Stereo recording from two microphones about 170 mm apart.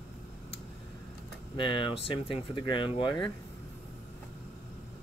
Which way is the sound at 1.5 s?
30° left (ahead or behind).